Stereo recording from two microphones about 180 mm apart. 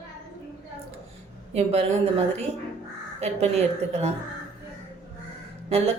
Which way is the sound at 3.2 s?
35° right (ahead or behind).